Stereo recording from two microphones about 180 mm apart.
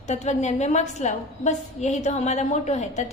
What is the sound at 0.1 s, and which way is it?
A woman's voice, 40° left (ahead or behind).